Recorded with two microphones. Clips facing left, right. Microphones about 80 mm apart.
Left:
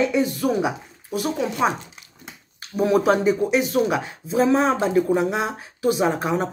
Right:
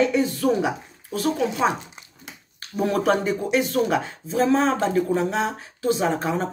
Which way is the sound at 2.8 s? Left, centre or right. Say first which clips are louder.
Left 3 dB; centre.